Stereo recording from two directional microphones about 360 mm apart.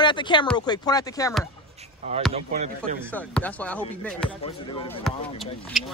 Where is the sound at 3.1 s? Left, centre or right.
Centre.